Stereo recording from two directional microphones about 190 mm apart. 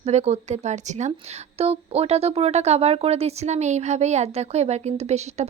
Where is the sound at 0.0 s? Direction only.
35° right (ahead or behind).